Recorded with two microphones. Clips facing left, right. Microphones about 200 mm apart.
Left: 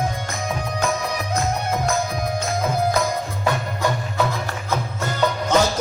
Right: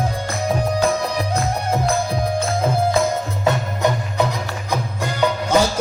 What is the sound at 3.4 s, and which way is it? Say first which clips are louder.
Music: right 4 dB; 20° right (ahead or behind).